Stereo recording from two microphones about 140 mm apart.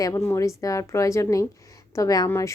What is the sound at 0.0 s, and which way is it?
A woman's voice, 20° left (ahead or behind).